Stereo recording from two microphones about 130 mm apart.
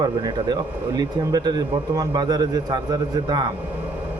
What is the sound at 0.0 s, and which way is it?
Speech, 30° right (ahead or behind).